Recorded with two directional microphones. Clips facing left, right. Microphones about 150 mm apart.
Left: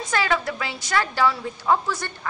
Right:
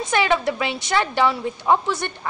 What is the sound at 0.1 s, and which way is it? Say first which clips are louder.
A woman's voice: right 4 dB; 20° right (ahead or behind).